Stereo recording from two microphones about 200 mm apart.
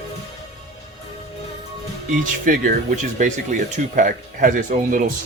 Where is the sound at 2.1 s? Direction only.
40° right (ahead or behind).